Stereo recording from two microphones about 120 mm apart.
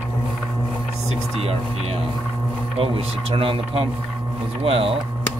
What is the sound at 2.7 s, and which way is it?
Speech, 50° right (ahead or behind).